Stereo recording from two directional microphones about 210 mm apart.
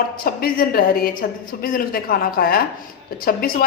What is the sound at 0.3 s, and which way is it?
A woman's voice, 45° left (ahead or behind).